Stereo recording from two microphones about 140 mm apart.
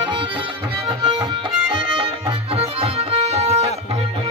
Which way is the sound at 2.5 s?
45° right (ahead or behind).